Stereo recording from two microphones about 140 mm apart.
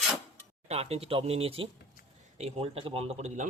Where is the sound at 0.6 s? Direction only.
45° right (ahead or behind).